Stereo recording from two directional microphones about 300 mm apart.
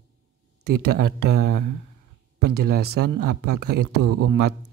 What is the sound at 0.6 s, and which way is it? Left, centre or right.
Speech, right.